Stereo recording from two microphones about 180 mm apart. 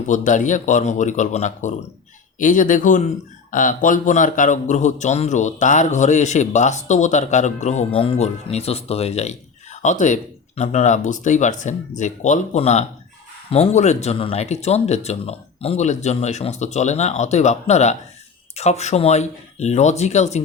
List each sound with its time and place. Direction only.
0.0 s a man's voice: 45° left (ahead or behind)